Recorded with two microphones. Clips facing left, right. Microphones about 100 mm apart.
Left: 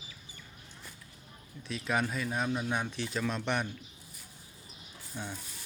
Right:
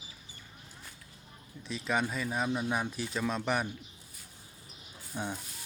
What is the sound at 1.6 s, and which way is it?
Speech, centre (ahead or behind).